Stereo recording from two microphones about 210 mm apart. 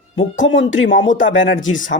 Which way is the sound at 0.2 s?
60° left (ahead or behind).